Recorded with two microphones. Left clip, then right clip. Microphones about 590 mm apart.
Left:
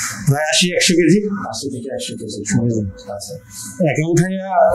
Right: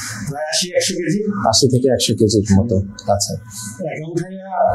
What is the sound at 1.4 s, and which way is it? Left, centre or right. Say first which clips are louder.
Speech: right 12 dB; right.